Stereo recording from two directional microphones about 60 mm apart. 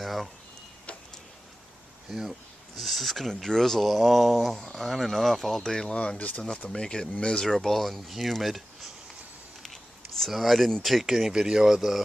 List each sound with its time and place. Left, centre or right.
0.0 s a sound: centre
2.0 s speech: centre; by 6.4 s left
6.7 s speech: centre
10.2 s speech: centre